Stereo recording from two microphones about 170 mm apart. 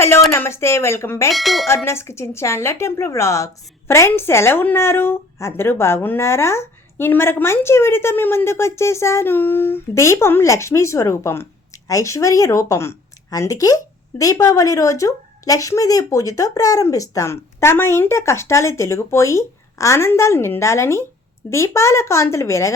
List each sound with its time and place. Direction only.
0.0 s speech: 15° left (ahead or behind)
1.3 s bell: centre (ahead or behind)
1.6 s speech: 15° left (ahead or behind)